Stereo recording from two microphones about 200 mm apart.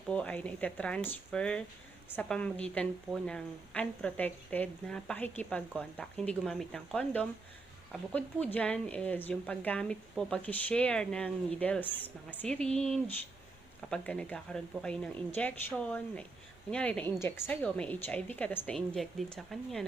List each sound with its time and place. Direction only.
0.1 s a woman's voice: 5° left (ahead or behind)